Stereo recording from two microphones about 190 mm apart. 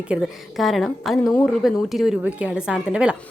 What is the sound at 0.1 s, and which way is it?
A woman's voice, centre (ahead or behind).